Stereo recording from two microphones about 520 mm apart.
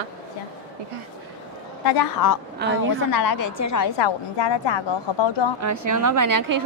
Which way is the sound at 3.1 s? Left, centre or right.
Left.